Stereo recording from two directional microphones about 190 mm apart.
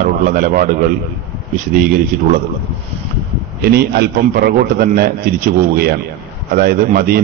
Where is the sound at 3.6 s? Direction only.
55° right (ahead or behind).